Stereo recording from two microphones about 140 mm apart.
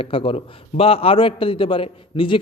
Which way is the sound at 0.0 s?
40° left (ahead or behind).